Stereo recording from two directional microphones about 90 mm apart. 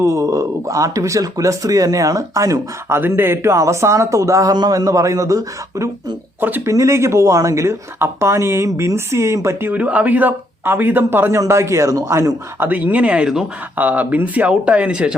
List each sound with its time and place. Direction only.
0.0 s speech: 35° right (ahead or behind)
3.0 s speech: 25° right (ahead or behind)
12.5 s speech: 20° right (ahead or behind)